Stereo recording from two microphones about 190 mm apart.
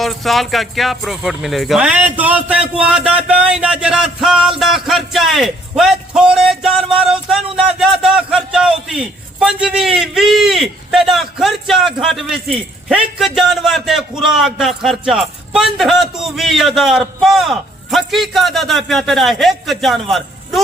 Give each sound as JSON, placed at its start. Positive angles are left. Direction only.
{"t": 0.0, "sound": "speech", "side_deg": 0}